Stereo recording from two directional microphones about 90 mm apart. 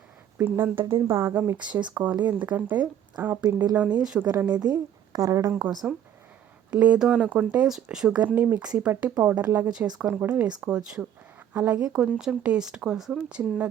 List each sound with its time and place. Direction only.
0.3 s speech: 25° right (ahead or behind)
1.6 s speech: 15° right (ahead or behind)
4.6 s a woman's voice: 45° right (ahead or behind)
5.8 s speech: 15° right (ahead or behind)
10.6 s speech: 10° right (ahead or behind)